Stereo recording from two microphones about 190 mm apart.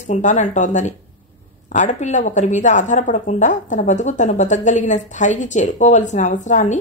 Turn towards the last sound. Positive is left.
turn(degrees=40)  # may be behind; listen again after turning